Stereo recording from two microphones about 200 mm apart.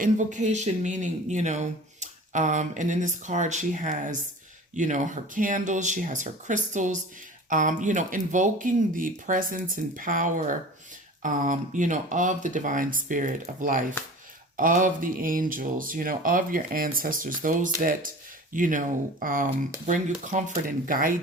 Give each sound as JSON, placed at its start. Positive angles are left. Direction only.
{"t": 0.0, "sound": "speech", "side_deg": -40}